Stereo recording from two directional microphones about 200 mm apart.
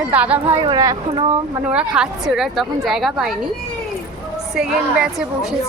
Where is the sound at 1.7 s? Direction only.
5° right (ahead or behind).